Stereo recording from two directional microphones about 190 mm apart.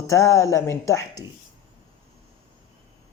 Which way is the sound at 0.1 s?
15° left (ahead or behind).